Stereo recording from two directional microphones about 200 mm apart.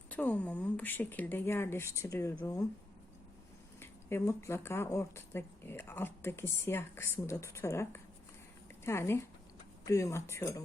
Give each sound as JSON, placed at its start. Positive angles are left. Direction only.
{"t": 0.1, "sound": "speech", "side_deg": 5}
{"t": 3.8, "sound": "speech", "side_deg": 10}